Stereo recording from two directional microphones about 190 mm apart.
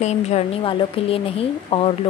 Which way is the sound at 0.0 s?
35° left (ahead or behind).